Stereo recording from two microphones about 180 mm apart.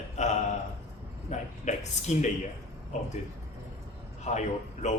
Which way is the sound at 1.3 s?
40° left (ahead or behind).